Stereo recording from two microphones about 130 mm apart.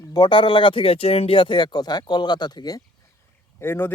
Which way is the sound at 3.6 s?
15° left (ahead or behind).